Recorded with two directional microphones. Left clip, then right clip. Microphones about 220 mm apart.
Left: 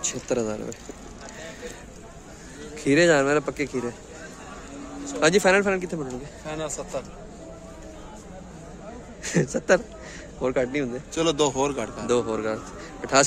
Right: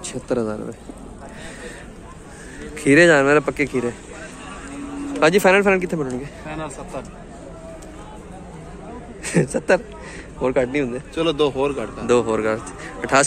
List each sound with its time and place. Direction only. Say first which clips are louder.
0.0 s speech: right 3 dB; centre (ahead or behind)
2.7 s speech: right 6 dB; centre (ahead or behind)
5.2 s speech: right 5 dB; 5° right (ahead or behind)
6.4 s speech: right 1 dB; 60° left (ahead or behind)
9.2 s a man's voice: right 4 dB; 10° left (ahead or behind)
11.1 s speech: right 3 dB; 55° left (ahead or behind)
12.1 s speech: right 7 dB; 5° left (ahead or behind)